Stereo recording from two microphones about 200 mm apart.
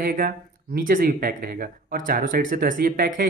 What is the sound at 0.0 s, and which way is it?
Speech, 45° right (ahead or behind).